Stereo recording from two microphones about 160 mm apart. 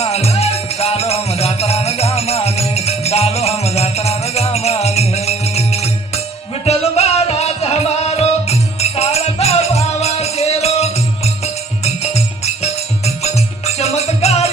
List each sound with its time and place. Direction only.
0.0 s music: 40° left (ahead or behind)